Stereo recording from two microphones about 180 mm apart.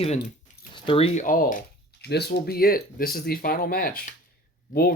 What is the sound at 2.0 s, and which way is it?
Speech, 65° left (ahead or behind).